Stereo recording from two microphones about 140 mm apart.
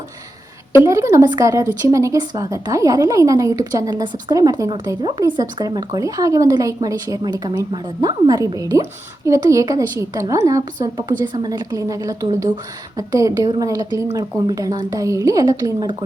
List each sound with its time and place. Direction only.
0.9 s a woman's voice: 20° right (ahead or behind)